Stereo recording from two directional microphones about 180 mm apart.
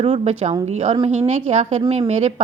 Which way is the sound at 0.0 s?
30° right (ahead or behind).